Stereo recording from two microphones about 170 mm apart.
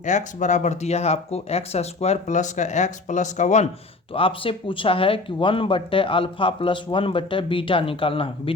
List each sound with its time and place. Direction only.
0.0 s speech: 45° left (ahead or behind)
4.1 s speech: 30° left (ahead or behind)